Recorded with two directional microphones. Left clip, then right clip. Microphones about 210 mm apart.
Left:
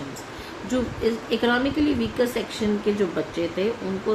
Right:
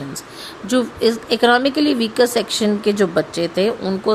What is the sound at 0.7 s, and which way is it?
A woman's voice, 55° right (ahead or behind).